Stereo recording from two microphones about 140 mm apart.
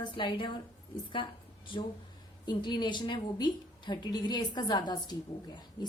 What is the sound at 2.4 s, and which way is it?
A woman's voice, 30° left (ahead or behind).